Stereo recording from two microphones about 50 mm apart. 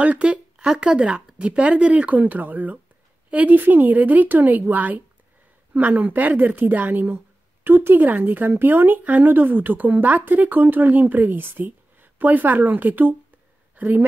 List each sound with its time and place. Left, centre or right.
0.2 s speech: centre; by 14.0 s right